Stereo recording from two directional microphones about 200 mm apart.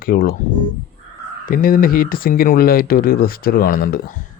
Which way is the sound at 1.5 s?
45° left (ahead or behind).